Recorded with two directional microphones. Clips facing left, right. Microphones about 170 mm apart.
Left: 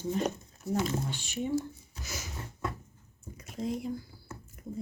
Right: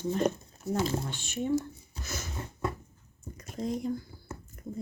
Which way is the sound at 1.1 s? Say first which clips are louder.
Right 2 dB; 10° left (ahead or behind).